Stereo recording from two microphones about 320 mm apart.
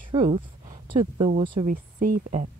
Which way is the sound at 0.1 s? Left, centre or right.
Centre.